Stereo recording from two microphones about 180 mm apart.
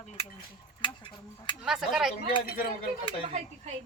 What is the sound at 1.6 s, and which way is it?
Speech, 5° right (ahead or behind).